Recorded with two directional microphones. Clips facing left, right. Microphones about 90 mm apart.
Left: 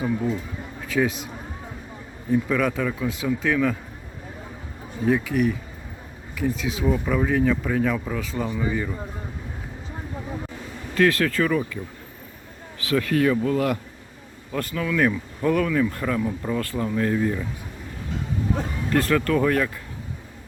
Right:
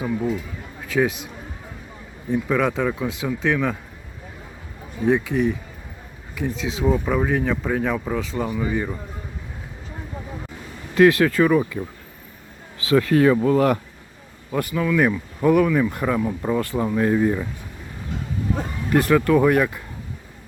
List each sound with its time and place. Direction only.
0.0 s speech: 15° right (ahead or behind)
2.3 s speech: 20° right (ahead or behind)
5.0 s speech: 20° right (ahead or behind)
10.9 s speech: 20° right (ahead or behind)
12.8 s speech: 25° right (ahead or behind)
14.5 s speech: 10° right (ahead or behind)
18.9 s speech: 15° right (ahead or behind)